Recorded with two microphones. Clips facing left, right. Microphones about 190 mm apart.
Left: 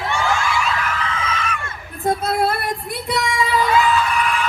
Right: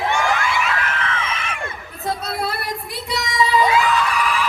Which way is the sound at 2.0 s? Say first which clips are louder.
Left 6 dB; 50° left (ahead or behind).